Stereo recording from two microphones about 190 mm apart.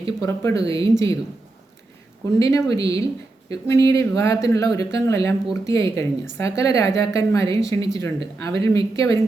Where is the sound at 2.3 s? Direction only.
15° left (ahead or behind).